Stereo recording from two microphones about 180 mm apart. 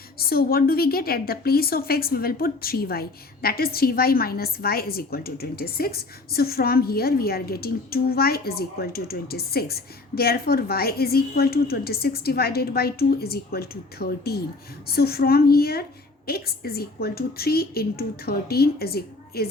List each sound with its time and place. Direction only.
0.2 s a woman's voice: 55° left (ahead or behind)